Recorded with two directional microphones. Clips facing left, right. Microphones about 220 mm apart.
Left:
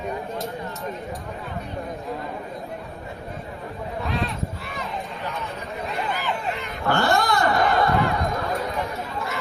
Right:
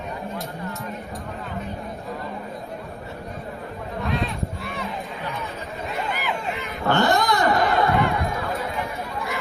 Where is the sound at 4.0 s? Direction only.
Centre (ahead or behind).